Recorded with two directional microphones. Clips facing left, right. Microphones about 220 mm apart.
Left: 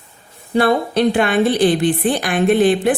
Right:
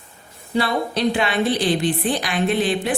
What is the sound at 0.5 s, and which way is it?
A woman's voice, 55° left (ahead or behind).